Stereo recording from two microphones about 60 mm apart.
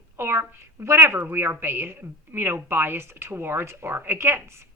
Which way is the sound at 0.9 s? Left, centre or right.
Right.